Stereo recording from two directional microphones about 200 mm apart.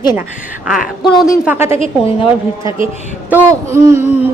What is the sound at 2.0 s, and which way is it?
Speech, 25° left (ahead or behind).